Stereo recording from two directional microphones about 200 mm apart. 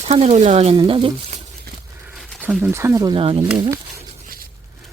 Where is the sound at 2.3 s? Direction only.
5° right (ahead or behind); by 3.8 s 25° right (ahead or behind).